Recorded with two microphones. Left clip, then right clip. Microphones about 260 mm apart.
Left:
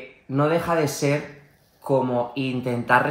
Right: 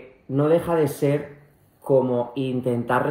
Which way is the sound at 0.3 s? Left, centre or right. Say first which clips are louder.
Right 1 dB; left.